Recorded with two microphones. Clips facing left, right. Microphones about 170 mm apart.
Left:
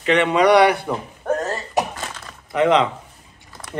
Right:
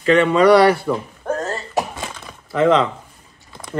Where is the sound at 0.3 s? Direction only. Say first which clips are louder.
Right 1 dB; 15° left (ahead or behind).